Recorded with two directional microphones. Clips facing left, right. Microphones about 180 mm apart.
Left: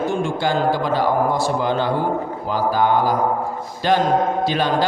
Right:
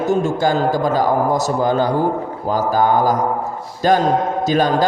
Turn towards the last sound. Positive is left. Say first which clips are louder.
# right 3 dB
turn(degrees=-45)  # may be behind; listen again after turning